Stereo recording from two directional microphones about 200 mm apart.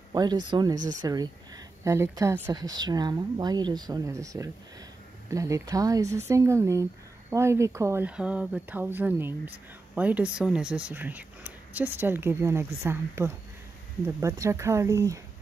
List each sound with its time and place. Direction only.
0.1 s speech: 20° right (ahead or behind)